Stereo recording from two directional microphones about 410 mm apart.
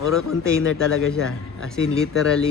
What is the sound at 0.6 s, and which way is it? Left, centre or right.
Speech, left.